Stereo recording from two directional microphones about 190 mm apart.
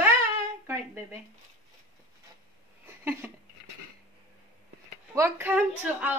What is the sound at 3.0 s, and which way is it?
Speech, 10° right (ahead or behind).